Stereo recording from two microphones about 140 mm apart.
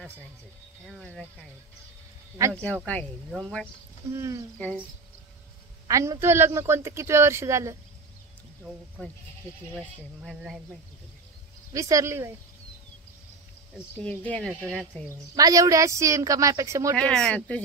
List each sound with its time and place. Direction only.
0.8 s speech: 5° left (ahead or behind)
2.5 s speech: 5° left (ahead or behind)
4.1 s speech: 20° right (ahead or behind)
5.9 s speech: 20° right (ahead or behind)
9.8 s speech: centre (ahead or behind)
11.7 s speech: 20° right (ahead or behind)
13.9 s speech: 10° left (ahead or behind)
15.3 s speech: 25° right (ahead or behind)
16.9 s speech: 5° left (ahead or behind)